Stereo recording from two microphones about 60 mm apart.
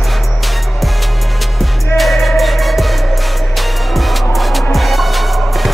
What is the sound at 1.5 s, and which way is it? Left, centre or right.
Music, centre.